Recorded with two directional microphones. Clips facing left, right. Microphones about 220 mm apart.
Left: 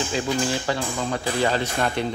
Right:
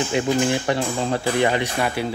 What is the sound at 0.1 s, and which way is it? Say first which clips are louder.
Speech: right 6 dB; 20° right (ahead or behind).